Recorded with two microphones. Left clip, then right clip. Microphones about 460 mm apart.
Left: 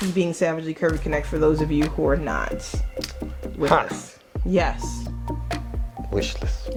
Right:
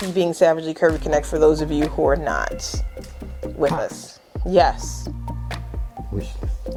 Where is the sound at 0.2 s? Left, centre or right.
Right.